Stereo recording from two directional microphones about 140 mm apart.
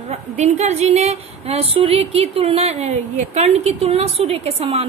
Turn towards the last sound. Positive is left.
turn(degrees=-45)  # may be behind; listen again after turning